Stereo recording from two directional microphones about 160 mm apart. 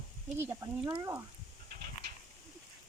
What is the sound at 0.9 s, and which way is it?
Speech, 25° right (ahead or behind).